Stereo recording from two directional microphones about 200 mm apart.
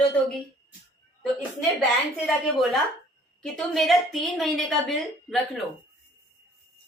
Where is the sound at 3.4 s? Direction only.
Centre (ahead or behind).